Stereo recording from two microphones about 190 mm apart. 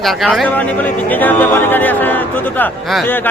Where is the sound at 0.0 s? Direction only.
Centre (ahead or behind).